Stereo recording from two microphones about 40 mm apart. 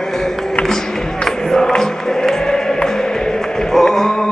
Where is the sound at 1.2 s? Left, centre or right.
Centre.